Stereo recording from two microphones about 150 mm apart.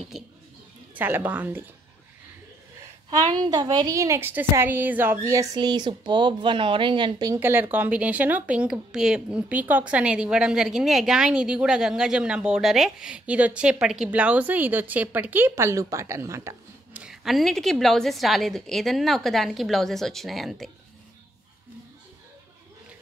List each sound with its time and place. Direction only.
0.1 s a sound: centre (ahead or behind)
0.9 s speech: 10° right (ahead or behind)
3.1 s a woman's voice: 30° right (ahead or behind)
7.3 s speech: 15° right (ahead or behind)
17.0 s a woman's voice: centre (ahead or behind)